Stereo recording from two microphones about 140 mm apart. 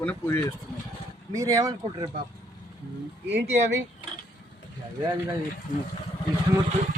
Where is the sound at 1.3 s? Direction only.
25° right (ahead or behind).